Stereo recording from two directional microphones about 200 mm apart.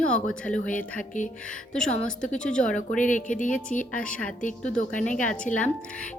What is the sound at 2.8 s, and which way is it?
Speech, 40° left (ahead or behind).